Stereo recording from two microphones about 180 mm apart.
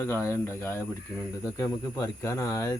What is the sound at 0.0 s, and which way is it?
Speech, 15° left (ahead or behind).